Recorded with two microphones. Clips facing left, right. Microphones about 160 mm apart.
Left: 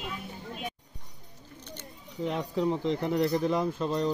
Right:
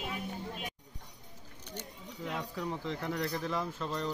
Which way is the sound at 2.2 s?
25° left (ahead or behind).